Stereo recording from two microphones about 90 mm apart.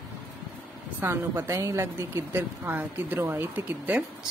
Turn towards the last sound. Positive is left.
turn(degrees=-20)  # may be behind; listen again after turning